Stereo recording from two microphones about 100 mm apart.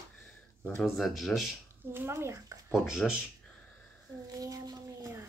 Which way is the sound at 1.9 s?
25° right (ahead or behind).